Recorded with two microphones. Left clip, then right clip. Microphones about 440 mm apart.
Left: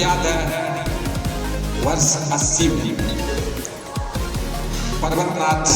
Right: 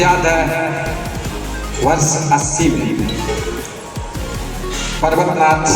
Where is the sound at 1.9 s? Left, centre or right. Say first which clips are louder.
Right 5 dB; left.